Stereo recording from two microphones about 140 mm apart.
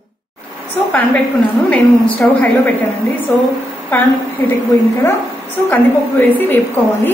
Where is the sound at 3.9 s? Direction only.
15° left (ahead or behind).